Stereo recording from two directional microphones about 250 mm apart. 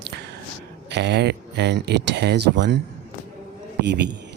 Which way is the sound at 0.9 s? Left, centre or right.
Right.